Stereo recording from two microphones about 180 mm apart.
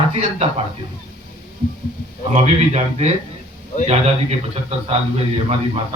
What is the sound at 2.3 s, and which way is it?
A man's voice, 35° right (ahead or behind).